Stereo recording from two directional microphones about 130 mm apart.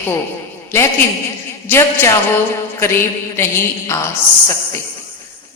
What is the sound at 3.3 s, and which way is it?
A woman's voice, 20° left (ahead or behind).